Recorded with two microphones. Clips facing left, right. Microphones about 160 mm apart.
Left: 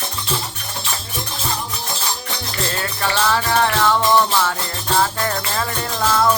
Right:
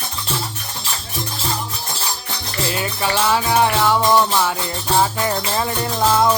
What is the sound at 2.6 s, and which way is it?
Music, 10° right (ahead or behind).